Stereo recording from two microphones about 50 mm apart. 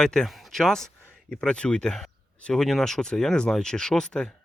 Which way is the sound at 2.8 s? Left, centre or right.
Centre.